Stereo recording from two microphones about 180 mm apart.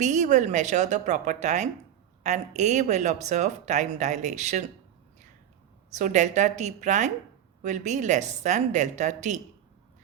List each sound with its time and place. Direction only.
0.0 s speech: 40° right (ahead or behind)
5.9 s a woman's voice: 45° right (ahead or behind)